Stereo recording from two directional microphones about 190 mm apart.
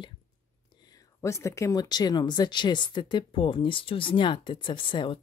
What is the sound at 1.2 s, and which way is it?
Speech, 15° left (ahead or behind).